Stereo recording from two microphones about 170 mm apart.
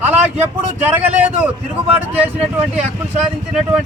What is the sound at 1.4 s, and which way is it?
A man's voice, 10° right (ahead or behind).